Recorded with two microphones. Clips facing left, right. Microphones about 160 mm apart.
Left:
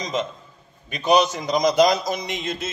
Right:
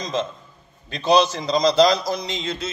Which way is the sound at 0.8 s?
15° left (ahead or behind).